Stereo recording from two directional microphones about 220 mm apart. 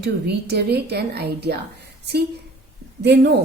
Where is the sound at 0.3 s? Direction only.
50° right (ahead or behind).